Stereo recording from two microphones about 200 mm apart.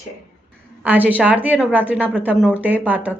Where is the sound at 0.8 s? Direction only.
10° right (ahead or behind).